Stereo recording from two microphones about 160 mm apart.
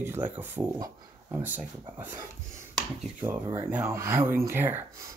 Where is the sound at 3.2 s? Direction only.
15° right (ahead or behind).